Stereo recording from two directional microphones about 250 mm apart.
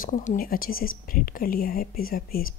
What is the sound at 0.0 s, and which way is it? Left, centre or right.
Speech, left.